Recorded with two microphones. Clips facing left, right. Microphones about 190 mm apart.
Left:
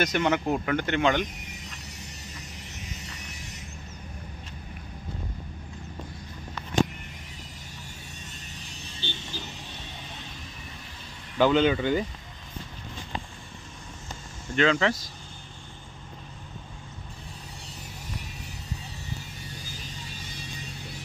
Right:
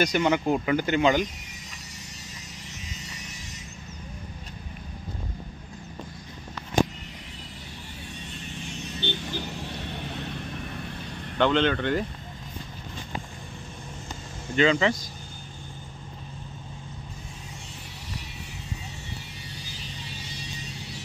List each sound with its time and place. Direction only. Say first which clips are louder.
0.0 s speech: right 2 dB; centre (ahead or behind)
9.0 s vehicle: right 6 dB; 60° right (ahead or behind)
11.3 s speech: left 1 dB; 5° left (ahead or behind)
14.5 s speech: right 1 dB; centre (ahead or behind)
19.5 s music: right 2 dB; 50° left (ahead or behind)